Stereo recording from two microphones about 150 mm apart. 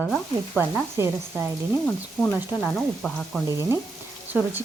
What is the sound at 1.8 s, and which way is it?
Speech, 10° left (ahead or behind).